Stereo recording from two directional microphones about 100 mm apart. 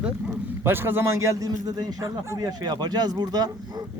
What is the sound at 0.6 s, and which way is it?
A man's voice, 20° right (ahead or behind).